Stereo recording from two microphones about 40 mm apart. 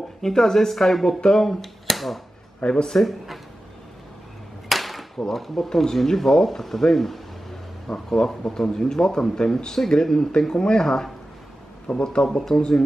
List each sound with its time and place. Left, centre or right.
0.2 s speech: centre
2.6 s speech: centre
2.9 s speech: centre
4.6 s a sound: centre
5.3 s speech: centre
11.9 s speech: left
12.3 s speech: centre